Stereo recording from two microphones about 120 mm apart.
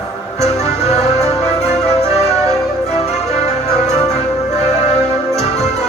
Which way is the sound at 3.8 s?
70° left (ahead or behind).